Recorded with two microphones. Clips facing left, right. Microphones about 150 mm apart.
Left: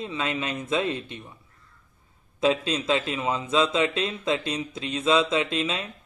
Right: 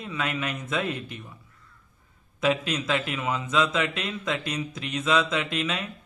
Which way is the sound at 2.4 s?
30° left (ahead or behind).